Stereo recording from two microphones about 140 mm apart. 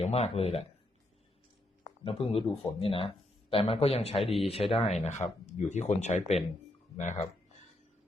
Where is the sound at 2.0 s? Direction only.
40° left (ahead or behind); by 7.3 s 60° left (ahead or behind).